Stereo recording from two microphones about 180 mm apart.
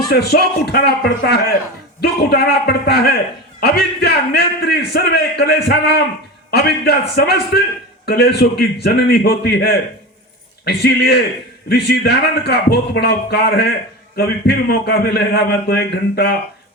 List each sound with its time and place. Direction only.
0.1 s a man's voice: 60° left (ahead or behind)